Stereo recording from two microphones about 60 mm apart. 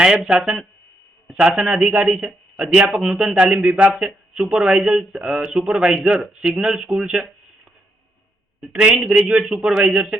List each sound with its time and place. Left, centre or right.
0.0 s speech: centre
8.7 s speech: right
9.0 s speech: centre